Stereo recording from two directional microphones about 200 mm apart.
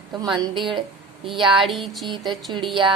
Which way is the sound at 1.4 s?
Centre (ahead or behind).